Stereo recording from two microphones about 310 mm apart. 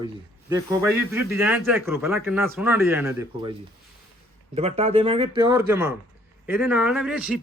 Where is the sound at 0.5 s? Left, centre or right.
Centre.